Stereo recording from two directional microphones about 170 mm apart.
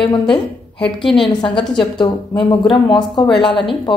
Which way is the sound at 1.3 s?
25° left (ahead or behind).